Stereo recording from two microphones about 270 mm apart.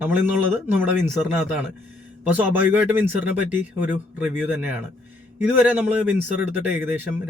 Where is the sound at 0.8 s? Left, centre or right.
Centre.